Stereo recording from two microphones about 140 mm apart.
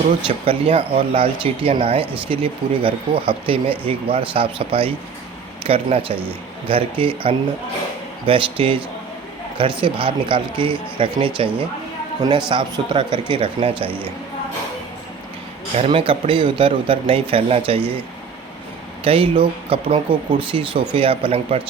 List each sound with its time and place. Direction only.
0.3 s speech: 40° right (ahead or behind)
12.5 s speech: 35° right (ahead or behind)
15.7 s speech: 45° right (ahead or behind)
19.0 s speech: 40° right (ahead or behind)